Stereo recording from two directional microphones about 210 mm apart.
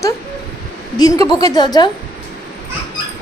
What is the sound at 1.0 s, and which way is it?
Speech, 15° left (ahead or behind).